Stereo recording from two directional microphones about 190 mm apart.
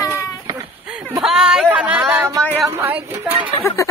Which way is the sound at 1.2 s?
5° right (ahead or behind).